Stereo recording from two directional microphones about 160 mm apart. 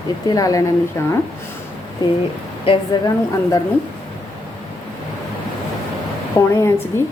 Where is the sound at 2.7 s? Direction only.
35° left (ahead or behind).